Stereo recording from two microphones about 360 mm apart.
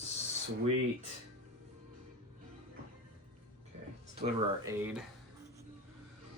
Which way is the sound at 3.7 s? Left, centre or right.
Centre.